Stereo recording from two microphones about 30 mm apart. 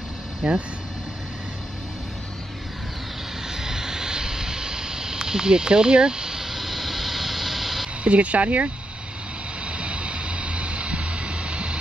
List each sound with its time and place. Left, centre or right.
0.4 s speech: right
3.5 s vehicle: centre
8.0 s speech: right
9.7 s vehicle: right